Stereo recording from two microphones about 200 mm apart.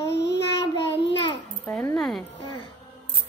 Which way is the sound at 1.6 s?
5° left (ahead or behind).